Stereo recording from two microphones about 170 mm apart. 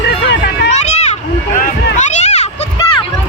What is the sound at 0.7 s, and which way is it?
Children playing, 40° left (ahead or behind).